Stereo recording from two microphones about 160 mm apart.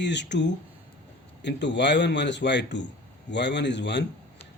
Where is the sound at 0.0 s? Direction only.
90° left.